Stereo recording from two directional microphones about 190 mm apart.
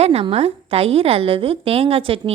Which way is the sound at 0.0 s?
30° right (ahead or behind).